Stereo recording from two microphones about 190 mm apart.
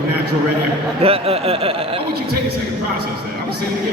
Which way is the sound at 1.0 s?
30° right (ahead or behind).